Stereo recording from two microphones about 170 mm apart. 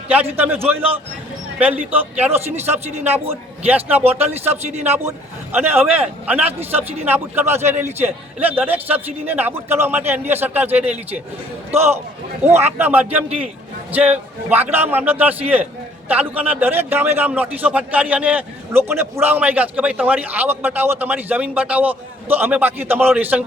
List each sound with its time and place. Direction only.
0.1 s a man's voice: 10° right (ahead or behind)
4.4 s speech: 40° right (ahead or behind)
5.0 s a man's voice: 10° right (ahead or behind)
12.8 s a man's voice: 10° right (ahead or behind)